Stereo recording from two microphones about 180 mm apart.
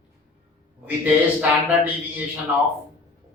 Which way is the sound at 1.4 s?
10° right (ahead or behind).